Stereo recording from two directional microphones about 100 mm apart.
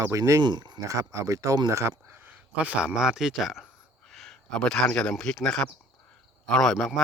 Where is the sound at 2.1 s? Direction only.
20° right (ahead or behind); by 6.9 s 5° left (ahead or behind).